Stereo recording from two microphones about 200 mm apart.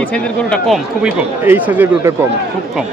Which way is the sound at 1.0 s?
10° right (ahead or behind).